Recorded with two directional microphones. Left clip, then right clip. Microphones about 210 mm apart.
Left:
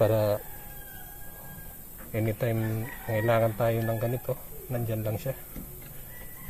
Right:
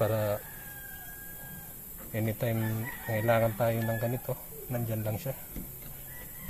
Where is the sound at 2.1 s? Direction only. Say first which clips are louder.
Left 3 dB; 20° left (ahead or behind).